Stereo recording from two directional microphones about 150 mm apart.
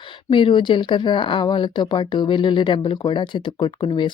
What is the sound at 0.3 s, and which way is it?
Speech, 35° left (ahead or behind).